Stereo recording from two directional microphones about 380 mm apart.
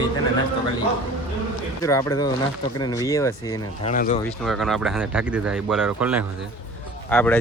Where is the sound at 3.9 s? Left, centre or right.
Centre.